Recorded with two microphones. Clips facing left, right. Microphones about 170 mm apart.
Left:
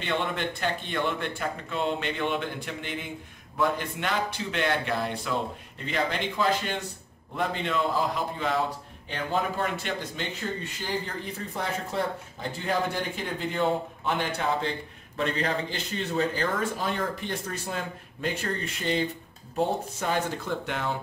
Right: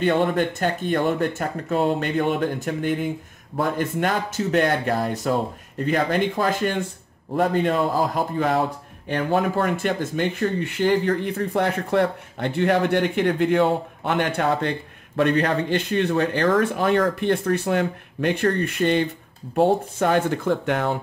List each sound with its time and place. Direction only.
0.0 s speech: 45° right (ahead or behind)